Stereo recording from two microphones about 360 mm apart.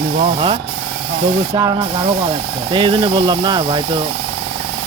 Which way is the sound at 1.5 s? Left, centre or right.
Centre.